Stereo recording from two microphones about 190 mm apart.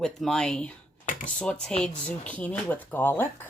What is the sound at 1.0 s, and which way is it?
Computer keyboard, 45° left (ahead or behind).